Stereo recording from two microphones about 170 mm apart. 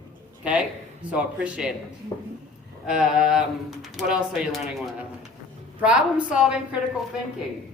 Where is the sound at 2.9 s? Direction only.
5° right (ahead or behind).